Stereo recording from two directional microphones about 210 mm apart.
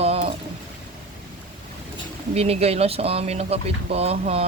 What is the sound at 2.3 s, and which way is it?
Speech, 30° right (ahead or behind).